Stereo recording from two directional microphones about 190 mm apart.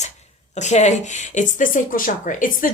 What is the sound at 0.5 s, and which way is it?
A woman's voice, 35° left (ahead or behind).